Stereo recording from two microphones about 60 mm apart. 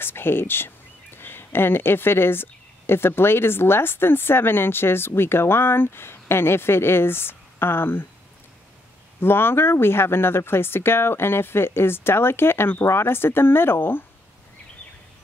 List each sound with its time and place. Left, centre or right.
0.0 s speech: left
9.2 s speech: left